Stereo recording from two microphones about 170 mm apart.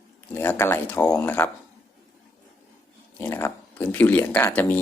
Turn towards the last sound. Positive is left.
turn(degrees=10)  # may be behind; listen again after turning